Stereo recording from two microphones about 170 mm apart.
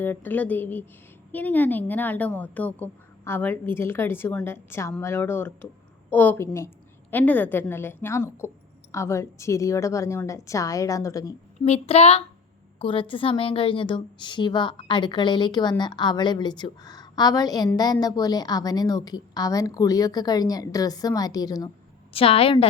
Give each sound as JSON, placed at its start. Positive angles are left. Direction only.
{"t": 0.0, "sound": "a woman's voice", "side_deg": 10}
{"t": 11.6, "sound": "a woman's voice", "side_deg": 40}
{"t": 22.1, "sound": "a woman's voice", "side_deg": 35}